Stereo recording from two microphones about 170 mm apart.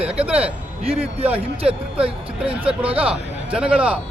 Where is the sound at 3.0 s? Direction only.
5° right (ahead or behind).